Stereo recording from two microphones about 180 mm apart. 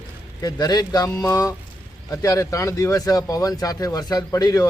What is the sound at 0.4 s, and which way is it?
A man's voice, 20° left (ahead or behind).